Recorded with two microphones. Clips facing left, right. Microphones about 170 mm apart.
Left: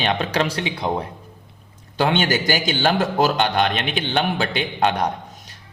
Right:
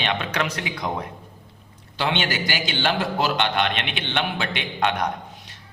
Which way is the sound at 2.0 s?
45° left (ahead or behind).